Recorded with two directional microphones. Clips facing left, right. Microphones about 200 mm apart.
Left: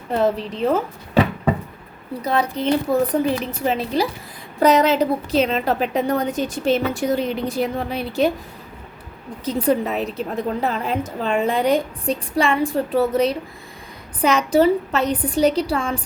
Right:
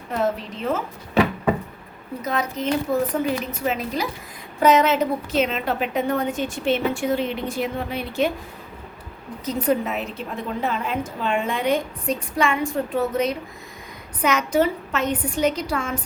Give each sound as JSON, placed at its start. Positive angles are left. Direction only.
{"t": 0.1, "sound": "a woman's voice", "side_deg": 35}
{"t": 2.2, "sound": "a woman's voice", "side_deg": 30}
{"t": 9.4, "sound": "a woman's voice", "side_deg": 30}